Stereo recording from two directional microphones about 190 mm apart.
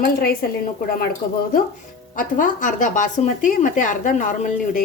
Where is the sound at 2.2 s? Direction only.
45° left (ahead or behind).